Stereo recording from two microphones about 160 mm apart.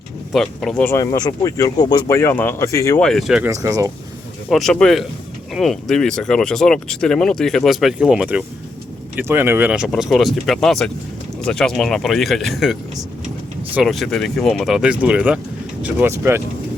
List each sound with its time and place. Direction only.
0.3 s speech: 5° left (ahead or behind)
0.9 s speech: 25° left (ahead or behind)
3.0 s speech: centre (ahead or behind)
3.5 s speech: 20° right (ahead or behind)
4.4 s speech: centre (ahead or behind)
13.8 s speech: centre (ahead or behind); by 16.4 s 15° right (ahead or behind)